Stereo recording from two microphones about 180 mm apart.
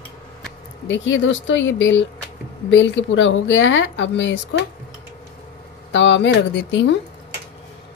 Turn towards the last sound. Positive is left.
turn(degrees=85)